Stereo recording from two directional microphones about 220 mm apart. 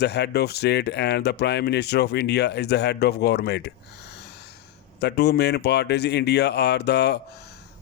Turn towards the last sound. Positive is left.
turn(degrees=50)  # may be behind; listen again after turning